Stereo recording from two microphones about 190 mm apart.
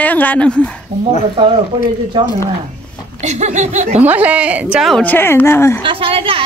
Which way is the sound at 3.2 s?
40° right (ahead or behind).